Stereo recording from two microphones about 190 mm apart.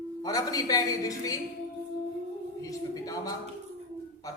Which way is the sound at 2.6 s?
20° left (ahead or behind).